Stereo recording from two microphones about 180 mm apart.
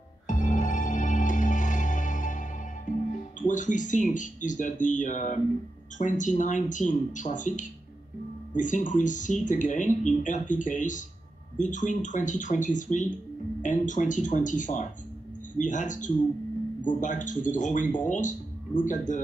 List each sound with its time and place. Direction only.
0.3 s music: 45° left (ahead or behind)
5.9 s speech: 45° left (ahead or behind)